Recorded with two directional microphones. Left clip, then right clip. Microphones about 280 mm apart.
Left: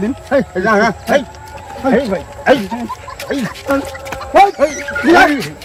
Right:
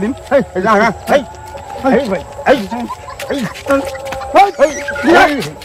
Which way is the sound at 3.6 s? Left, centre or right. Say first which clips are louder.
Right 4 dB; centre.